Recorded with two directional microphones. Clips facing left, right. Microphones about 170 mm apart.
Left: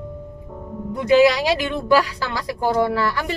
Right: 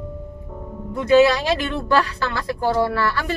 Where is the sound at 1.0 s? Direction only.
15° left (ahead or behind).